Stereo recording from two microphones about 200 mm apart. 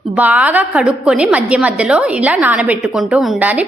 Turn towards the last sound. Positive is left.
turn(degrees=-10)  # may be behind; listen again after turning